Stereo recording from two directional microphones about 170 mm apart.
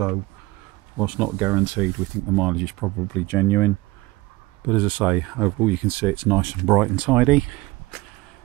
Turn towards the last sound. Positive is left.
turn(degrees=-5)  # may be behind; listen again after turning